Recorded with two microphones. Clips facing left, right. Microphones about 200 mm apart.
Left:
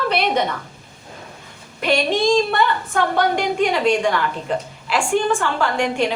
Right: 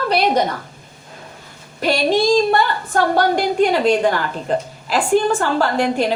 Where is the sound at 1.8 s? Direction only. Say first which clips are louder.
Right 2 dB; 40° right (ahead or behind).